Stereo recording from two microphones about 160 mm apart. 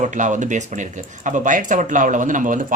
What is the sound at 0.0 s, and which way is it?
Speech, 50° right (ahead or behind).